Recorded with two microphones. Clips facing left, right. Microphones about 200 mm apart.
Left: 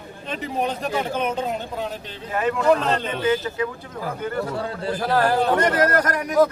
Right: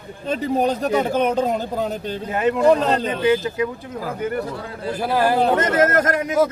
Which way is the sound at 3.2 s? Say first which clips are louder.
Right 3 dB; 15° right (ahead or behind).